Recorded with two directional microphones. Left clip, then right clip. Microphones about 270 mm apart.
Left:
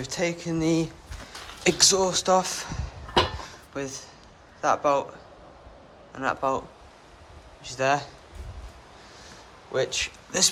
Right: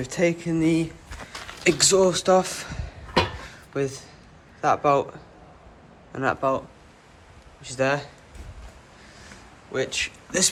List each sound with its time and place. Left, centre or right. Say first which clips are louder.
0.0 s a man's voice: right 5 dB; centre
3.4 s drawer open or close: right 6 dB; centre
4.6 s a man's voice: right 2 dB; centre
6.1 s a man's voice: right 3 dB; centre
7.6 s a man's voice: even; centre
9.7 s a man's voice: even; centre